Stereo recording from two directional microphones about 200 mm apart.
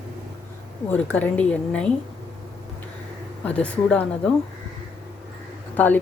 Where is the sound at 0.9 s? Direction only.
10° left (ahead or behind).